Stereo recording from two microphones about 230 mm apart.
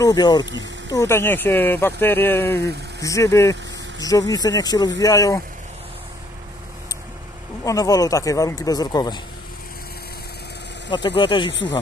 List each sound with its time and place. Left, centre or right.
0.0 s speech: centre
7.6 s speech: centre
10.9 s speech: left